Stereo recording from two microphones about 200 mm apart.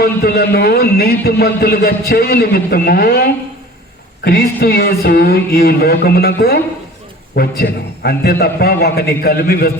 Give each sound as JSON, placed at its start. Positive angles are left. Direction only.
{"t": 0.0, "sound": "a man's voice", "side_deg": 50}